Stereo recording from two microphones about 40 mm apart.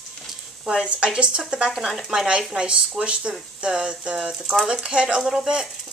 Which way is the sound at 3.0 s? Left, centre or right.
Right.